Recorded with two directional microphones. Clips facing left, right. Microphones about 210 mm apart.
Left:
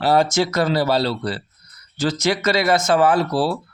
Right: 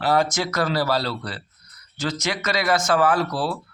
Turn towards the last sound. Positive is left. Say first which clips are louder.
# left 4 dB
turn(degrees=30)  # may be behind; listen again after turning